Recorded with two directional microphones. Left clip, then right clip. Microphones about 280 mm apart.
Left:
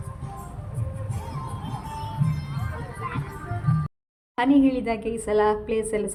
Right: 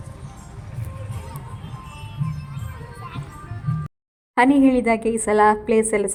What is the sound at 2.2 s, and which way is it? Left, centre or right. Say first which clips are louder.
Music: left 2 dB; centre.